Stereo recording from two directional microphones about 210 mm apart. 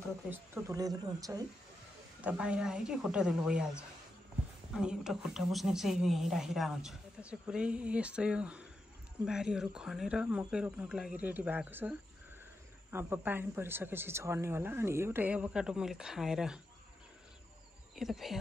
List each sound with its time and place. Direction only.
0.3 s speech: 15° right (ahead or behind)
2.2 s a woman's voice: 5° right (ahead or behind)
17.9 s a woman's voice: centre (ahead or behind)